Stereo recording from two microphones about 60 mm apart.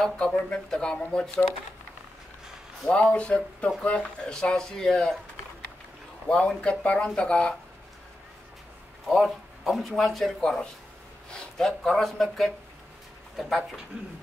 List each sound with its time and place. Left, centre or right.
0.5 s speech: centre
2.8 s speech: centre
6.2 s speech: centre
9.0 s speech: centre